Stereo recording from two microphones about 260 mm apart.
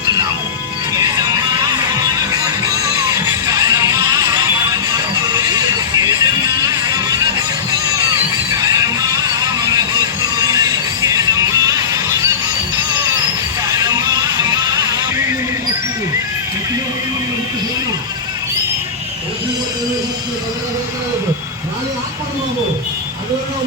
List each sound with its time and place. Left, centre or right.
2.0 s music: centre
8.4 s music: centre
13.7 s music: centre